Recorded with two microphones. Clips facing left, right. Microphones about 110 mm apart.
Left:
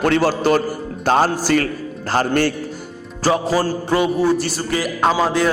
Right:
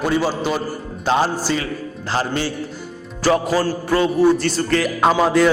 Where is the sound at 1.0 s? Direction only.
45° left (ahead or behind).